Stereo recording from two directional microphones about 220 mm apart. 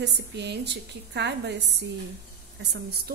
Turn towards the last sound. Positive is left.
turn(degrees=-50)  # may be behind; listen again after turning